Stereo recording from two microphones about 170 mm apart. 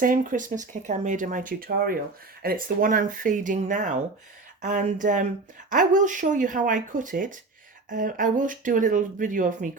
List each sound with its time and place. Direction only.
0.0 s speech: 50° right (ahead or behind)